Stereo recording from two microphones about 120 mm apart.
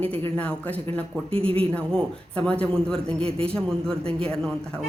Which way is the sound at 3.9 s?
50° right (ahead or behind).